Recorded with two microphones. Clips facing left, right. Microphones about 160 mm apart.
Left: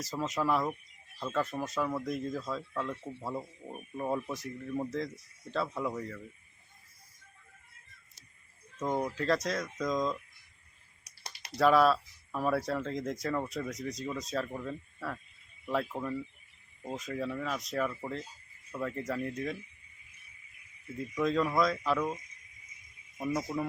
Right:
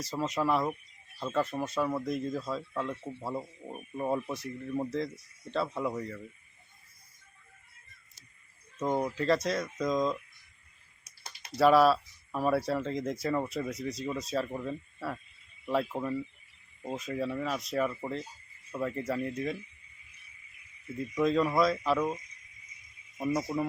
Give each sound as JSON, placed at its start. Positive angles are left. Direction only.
{"t": 0.0, "sound": "speech", "side_deg": 0}
{"t": 3.0, "sound": "a man's voice", "side_deg": -20}
{"t": 3.2, "sound": "speech", "side_deg": 0}
{"t": 8.8, "sound": "speech", "side_deg": -5}
{"t": 11.5, "sound": "speech", "side_deg": -5}
{"t": 21.0, "sound": "speech", "side_deg": 0}